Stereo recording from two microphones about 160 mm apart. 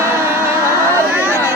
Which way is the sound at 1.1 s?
15° right (ahead or behind).